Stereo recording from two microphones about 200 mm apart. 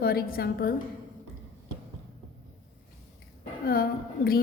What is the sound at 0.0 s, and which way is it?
Speech, 50° left (ahead or behind).